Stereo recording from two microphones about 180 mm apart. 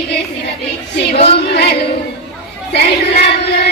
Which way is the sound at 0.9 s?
65° left (ahead or behind).